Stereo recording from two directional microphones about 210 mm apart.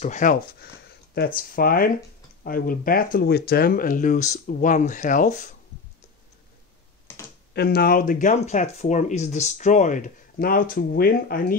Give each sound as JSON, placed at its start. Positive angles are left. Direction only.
{"t": 0.0, "sound": "speech", "side_deg": 35}
{"t": 7.5, "sound": "speech", "side_deg": 50}